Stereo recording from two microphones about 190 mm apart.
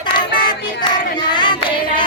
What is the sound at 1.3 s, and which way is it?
Singing, 25° left (ahead or behind).